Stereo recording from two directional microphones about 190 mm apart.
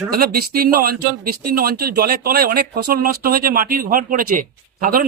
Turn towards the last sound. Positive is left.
turn(degrees=-45)  # may be behind; listen again after turning